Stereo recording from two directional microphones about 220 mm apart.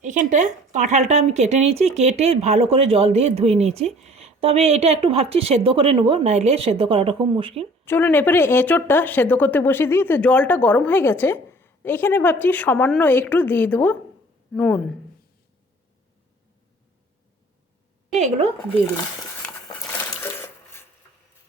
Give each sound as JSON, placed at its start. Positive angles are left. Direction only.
{"t": 0.0, "sound": "speech", "side_deg": -35}
{"t": 7.9, "sound": "speech", "side_deg": 10}
{"t": 18.2, "sound": "speech", "side_deg": -25}
{"t": 20.0, "sound": "sewing machine", "side_deg": 10}